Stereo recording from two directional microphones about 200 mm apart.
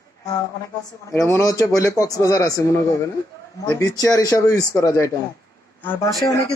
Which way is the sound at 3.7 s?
15° left (ahead or behind).